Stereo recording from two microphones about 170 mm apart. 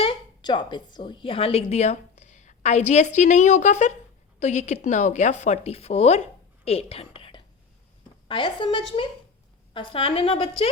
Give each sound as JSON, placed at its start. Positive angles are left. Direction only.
{"t": 0.0, "sound": "a woman's voice", "side_deg": 30}